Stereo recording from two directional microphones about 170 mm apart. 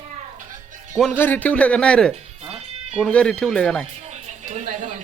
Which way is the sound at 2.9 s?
5° left (ahead or behind).